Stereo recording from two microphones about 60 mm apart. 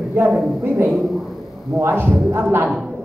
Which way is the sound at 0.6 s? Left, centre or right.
Right.